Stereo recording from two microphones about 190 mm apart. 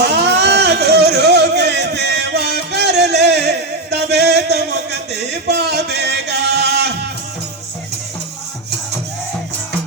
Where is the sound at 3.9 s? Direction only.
60° right (ahead or behind).